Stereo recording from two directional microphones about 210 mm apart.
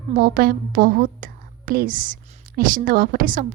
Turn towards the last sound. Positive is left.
turn(degrees=-40)  # may be behind; listen again after turning